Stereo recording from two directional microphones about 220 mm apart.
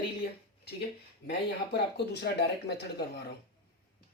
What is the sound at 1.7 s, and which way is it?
Speech, 50° left (ahead or behind).